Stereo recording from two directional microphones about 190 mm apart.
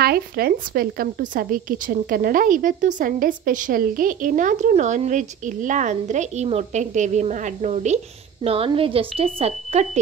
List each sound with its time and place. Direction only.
0.0 s speech: 55° right (ahead or behind); by 9.8 s 35° right (ahead or behind)